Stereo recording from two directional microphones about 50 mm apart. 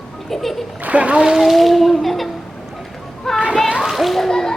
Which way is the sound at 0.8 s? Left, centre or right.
Right.